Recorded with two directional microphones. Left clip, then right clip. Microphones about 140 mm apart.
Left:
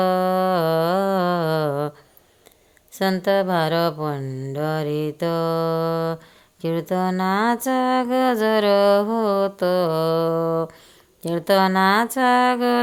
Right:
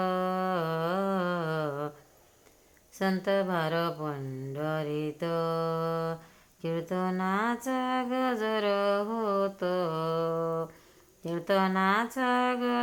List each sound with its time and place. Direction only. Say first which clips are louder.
0.0 s music: left 10 dB; 45° left (ahead or behind)
3.2 s speech: left 9 dB; 40° left (ahead or behind)
12.1 s a sound: left 10 dB; 45° left (ahead or behind)